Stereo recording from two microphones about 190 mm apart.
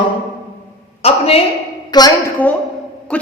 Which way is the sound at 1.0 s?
30° left (ahead or behind).